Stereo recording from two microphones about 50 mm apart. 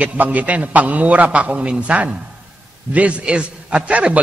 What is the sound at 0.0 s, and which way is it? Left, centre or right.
A man's voice, right.